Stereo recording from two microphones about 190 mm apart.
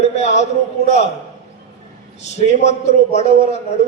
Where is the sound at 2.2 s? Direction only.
35° left (ahead or behind).